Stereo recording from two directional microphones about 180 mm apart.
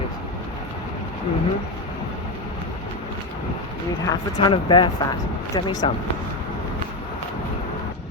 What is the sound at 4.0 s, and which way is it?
Speech, 20° left (ahead or behind).